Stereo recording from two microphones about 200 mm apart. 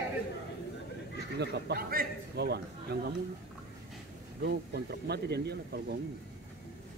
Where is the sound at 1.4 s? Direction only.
50° right (ahead or behind).